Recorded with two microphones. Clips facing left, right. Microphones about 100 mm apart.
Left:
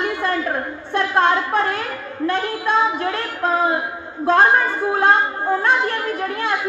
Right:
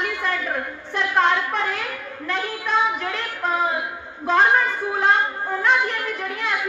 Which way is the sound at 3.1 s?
40° left (ahead or behind).